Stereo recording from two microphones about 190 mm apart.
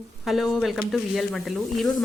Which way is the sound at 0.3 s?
Centre (ahead or behind).